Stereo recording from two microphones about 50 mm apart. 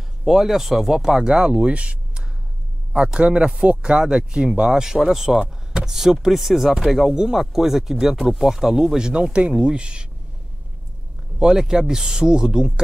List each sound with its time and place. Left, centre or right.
0.2 s speech: centre
5.4 s vehicle: centre
5.9 s speech: centre
11.3 s speech: centre